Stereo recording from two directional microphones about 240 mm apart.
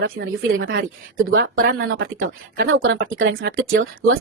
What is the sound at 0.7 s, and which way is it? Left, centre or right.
A woman's voice, right.